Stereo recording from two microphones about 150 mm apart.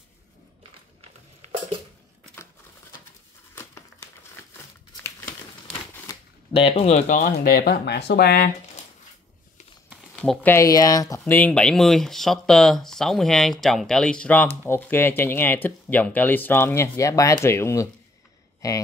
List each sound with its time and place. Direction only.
6.1 s shuffling cards: 25° left (ahead or behind)
6.5 s speech: 40° left (ahead or behind)
7.2 s speech: 75° left (ahead or behind); by 8.5 s 90° left
10.1 s a sound: centre (ahead or behind)
10.4 s speech: 20° left (ahead or behind)
11.2 s speech: 10° left (ahead or behind)